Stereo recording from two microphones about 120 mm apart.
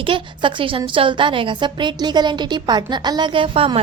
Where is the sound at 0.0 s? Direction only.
45° right (ahead or behind).